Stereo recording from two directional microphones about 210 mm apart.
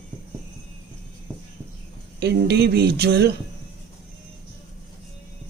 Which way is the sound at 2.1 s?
50° right (ahead or behind).